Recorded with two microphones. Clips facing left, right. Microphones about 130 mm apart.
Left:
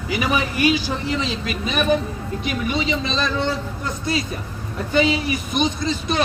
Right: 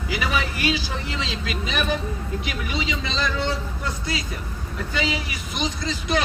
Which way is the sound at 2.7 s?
25° left (ahead or behind).